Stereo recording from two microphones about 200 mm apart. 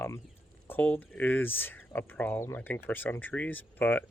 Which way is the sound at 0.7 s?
10° left (ahead or behind).